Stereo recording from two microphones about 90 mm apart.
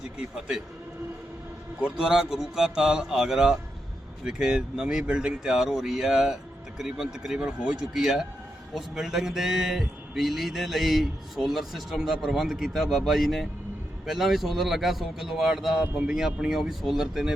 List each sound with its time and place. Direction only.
0.2 s speech: 10° right (ahead or behind)
1.8 s speech: 5° right (ahead or behind)